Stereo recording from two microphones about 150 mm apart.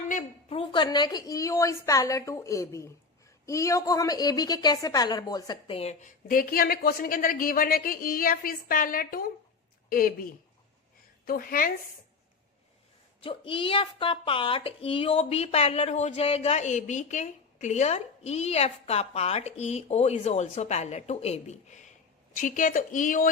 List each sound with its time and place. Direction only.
0.1 s a sound: 55° left (ahead or behind)
0.5 s a woman's voice: 35° left (ahead or behind)
5.7 s a woman's voice: 45° left (ahead or behind); by 10.2 s 75° left (ahead or behind)
11.3 s a woman's voice: 75° left (ahead or behind)
13.2 s a woman's voice: 35° left (ahead or behind); by 23.3 s 65° left (ahead or behind)